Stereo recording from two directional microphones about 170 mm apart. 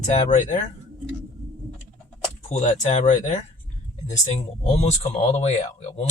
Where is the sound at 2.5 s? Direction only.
45° left (ahead or behind).